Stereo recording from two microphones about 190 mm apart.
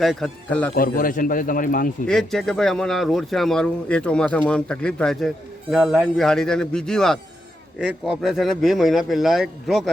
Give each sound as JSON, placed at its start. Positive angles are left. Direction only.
{"t": 0.0, "sound": "speech", "side_deg": 0}
{"t": 0.8, "sound": "a man's voice", "side_deg": 45}
{"t": 2.0, "sound": "speech", "side_deg": 0}